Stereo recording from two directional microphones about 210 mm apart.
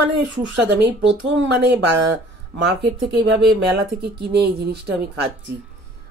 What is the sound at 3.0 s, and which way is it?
Speech, 55° right (ahead or behind).